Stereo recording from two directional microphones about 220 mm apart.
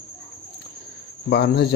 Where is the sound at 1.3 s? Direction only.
50° left (ahead or behind).